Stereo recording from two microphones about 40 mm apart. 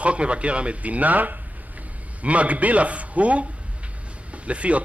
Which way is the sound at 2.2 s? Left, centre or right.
Right.